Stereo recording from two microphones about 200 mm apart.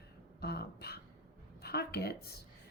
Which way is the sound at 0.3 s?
55° left (ahead or behind).